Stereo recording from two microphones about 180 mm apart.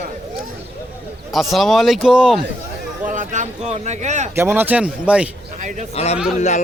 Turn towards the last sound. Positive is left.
turn(degrees=40)  # may be behind; listen again after turning